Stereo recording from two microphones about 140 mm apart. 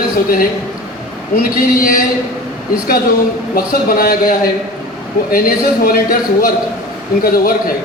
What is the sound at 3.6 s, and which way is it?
A man's voice, 90° left.